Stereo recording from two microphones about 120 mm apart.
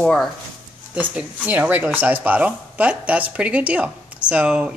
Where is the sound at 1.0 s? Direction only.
10° right (ahead or behind).